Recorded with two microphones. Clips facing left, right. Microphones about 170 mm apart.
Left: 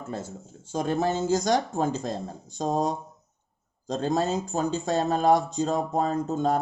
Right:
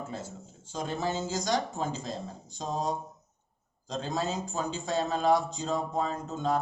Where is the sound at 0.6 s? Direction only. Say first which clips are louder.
Left 7 dB; 50° left (ahead or behind).